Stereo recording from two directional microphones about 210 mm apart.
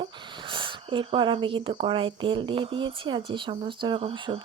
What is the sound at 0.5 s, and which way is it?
Speech, 25° right (ahead or behind).